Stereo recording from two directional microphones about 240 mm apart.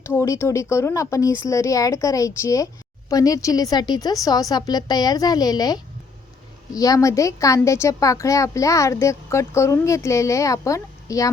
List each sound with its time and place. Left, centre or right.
0.0 s a woman's voice: centre